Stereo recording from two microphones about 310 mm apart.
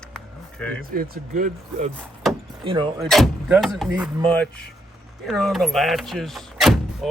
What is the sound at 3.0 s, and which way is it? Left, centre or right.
Speech, centre.